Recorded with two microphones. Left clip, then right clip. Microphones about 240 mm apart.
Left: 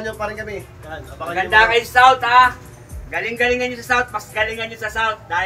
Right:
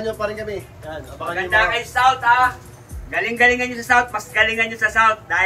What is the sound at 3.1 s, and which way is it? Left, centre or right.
A man's voice, centre.